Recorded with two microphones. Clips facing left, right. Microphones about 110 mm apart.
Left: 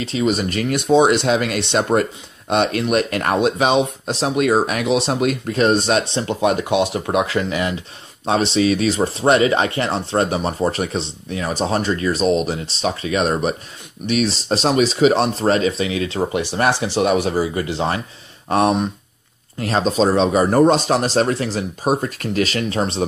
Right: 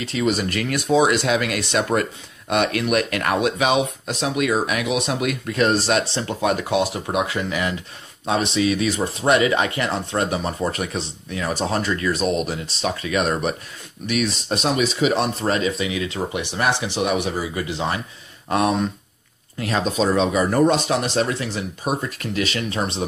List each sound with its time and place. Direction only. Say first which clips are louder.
0.0 s speech: left 2 dB; 25° left (ahead or behind)